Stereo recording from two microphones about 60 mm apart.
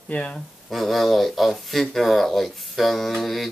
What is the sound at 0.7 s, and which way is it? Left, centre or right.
Speech, centre.